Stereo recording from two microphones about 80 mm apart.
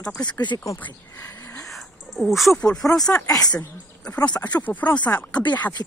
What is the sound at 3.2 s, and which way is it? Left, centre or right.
Speech, left.